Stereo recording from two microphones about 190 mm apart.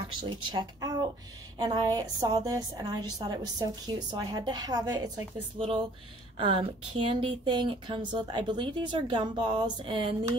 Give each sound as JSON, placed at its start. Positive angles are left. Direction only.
{"t": 0.1, "sound": "a woman's voice", "side_deg": -25}